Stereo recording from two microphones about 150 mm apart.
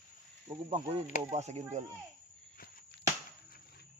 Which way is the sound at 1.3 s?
50° right (ahead or behind).